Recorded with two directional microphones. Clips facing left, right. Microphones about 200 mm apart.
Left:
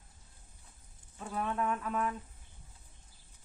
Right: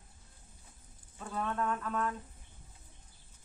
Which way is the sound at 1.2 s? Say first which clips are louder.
Left 1 dB; 10° left (ahead or behind).